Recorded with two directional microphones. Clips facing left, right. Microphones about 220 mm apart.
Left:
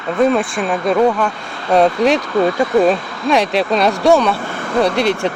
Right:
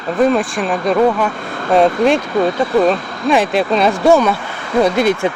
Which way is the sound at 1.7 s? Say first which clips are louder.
Right 1 dB; centre (ahead or behind).